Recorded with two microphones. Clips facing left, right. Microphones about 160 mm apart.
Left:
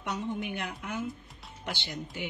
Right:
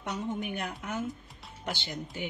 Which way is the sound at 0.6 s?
40° right (ahead or behind).